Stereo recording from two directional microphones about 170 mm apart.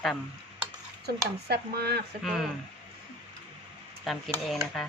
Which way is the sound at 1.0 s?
70° right (ahead or behind).